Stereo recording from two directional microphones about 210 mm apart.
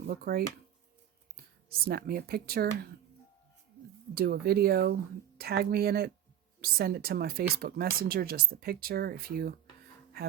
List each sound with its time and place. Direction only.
0.1 s speech: 45° right (ahead or behind)
1.8 s speech: 45° right (ahead or behind)
4.1 s speech: 45° right (ahead or behind)